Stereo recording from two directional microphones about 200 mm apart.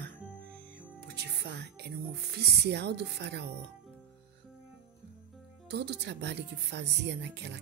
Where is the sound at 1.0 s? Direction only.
55° right (ahead or behind).